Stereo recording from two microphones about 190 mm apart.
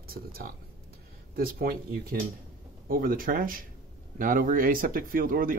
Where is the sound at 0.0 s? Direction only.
50° right (ahead or behind).